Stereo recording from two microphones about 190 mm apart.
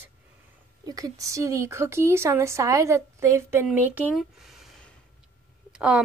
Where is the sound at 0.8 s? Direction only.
20° right (ahead or behind).